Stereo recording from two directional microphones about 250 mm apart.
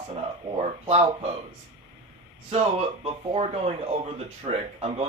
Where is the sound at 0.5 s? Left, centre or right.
Right.